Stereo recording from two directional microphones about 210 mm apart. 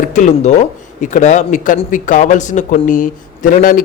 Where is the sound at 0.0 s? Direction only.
35° left (ahead or behind).